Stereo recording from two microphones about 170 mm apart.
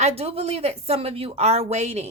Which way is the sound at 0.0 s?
40° right (ahead or behind).